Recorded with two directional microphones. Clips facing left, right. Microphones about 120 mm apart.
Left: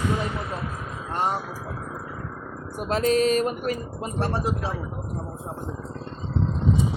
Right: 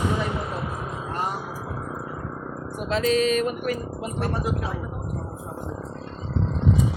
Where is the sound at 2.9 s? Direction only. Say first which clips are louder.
Left 1 dB; 40° left (ahead or behind).